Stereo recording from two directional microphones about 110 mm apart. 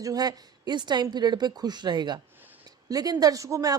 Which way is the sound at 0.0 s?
35° right (ahead or behind).